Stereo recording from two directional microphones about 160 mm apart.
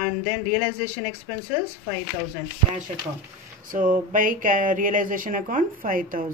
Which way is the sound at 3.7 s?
60° right (ahead or behind).